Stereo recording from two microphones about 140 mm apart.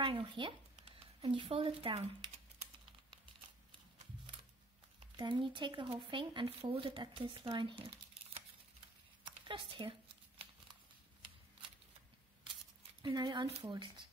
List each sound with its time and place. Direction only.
0.0 s speech: 35° right (ahead or behind)
5.1 s speech: 35° right (ahead or behind)
9.2 s a sound: 35° right (ahead or behind)
13.0 s speech: 30° right (ahead or behind)
13.5 s speech: 40° right (ahead or behind)